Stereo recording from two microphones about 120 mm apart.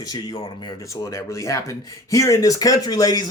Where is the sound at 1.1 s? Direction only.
25° left (ahead or behind).